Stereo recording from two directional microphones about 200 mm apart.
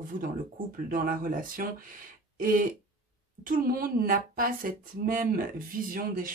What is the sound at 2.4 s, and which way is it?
Throat clearing, 45° right (ahead or behind).